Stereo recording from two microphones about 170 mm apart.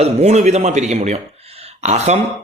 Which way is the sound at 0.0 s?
40° right (ahead or behind).